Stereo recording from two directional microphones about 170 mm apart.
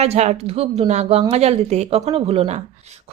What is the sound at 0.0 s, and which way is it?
A woman's voice, 40° right (ahead or behind).